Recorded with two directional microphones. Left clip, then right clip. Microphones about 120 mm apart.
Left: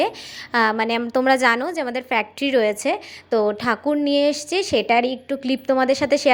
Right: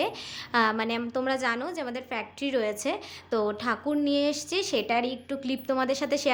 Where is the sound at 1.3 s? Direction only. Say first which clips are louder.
Left 12 dB; 70° left (ahead or behind).